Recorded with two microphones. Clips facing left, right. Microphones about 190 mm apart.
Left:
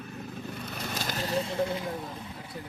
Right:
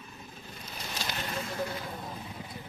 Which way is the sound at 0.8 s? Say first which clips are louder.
Left 3 dB; 45° left (ahead or behind).